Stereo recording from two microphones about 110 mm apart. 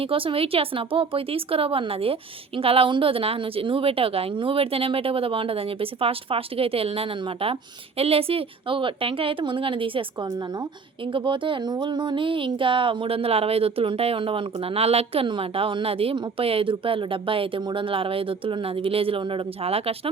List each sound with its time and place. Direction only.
0.0 s a woman's voice: 55° right (ahead or behind)
11.0 s speech: 50° right (ahead or behind)